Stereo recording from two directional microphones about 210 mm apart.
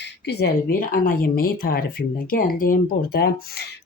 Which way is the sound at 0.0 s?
50° left (ahead or behind).